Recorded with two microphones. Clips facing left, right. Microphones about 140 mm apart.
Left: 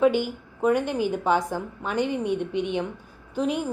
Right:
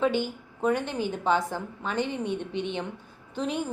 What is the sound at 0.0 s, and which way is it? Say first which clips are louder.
A woman's voice: left 5 dB; 10° left (ahead or behind).